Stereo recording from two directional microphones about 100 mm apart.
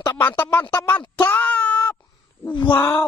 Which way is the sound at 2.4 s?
50° left (ahead or behind).